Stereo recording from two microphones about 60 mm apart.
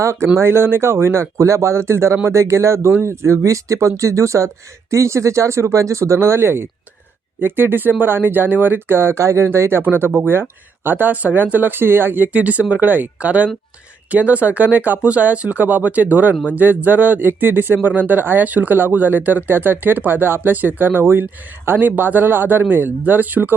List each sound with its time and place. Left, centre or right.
0.0 s speech: right
0.3 s speech: right
9.8 s speech: right